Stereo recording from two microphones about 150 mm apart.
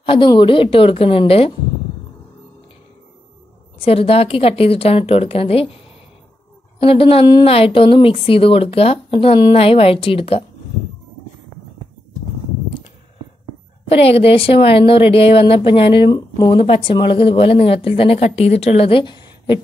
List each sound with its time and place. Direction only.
0.0 s speech: 35° left (ahead or behind)
3.8 s speech: 40° left (ahead or behind)
6.8 s speech: 40° left (ahead or behind)
13.8 s speech: 40° left (ahead or behind)